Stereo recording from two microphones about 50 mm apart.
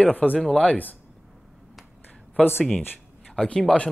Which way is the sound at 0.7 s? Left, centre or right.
Left.